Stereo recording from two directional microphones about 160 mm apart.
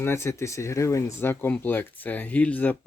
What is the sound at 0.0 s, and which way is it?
Speech, 15° left (ahead or behind).